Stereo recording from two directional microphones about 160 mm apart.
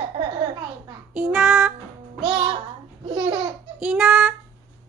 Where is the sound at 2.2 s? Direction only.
30° right (ahead or behind).